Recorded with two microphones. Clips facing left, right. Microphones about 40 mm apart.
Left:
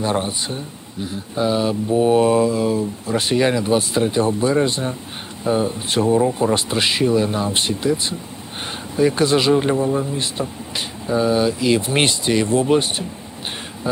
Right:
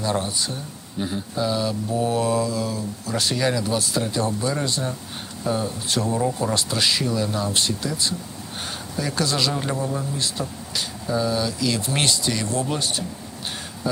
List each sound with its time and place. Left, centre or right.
0.0 s speech: left